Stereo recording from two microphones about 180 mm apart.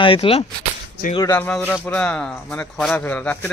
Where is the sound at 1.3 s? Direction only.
10° left (ahead or behind).